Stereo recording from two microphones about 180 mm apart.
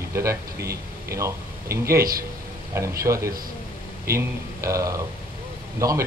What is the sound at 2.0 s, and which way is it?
Speech, 55° right (ahead or behind).